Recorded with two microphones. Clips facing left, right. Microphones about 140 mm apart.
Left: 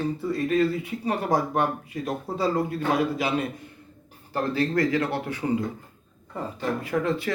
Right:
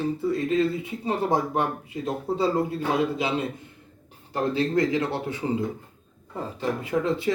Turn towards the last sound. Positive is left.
turn(degrees=-20)  # may be behind; listen again after turning